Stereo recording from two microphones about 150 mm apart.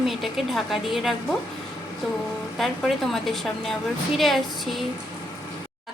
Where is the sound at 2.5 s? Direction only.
Centre (ahead or behind).